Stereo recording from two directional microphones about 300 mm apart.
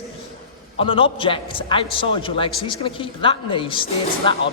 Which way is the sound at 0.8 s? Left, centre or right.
Centre.